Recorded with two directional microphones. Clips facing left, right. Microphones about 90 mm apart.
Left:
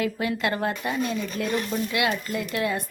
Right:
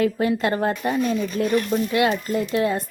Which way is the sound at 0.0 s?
35° right (ahead or behind).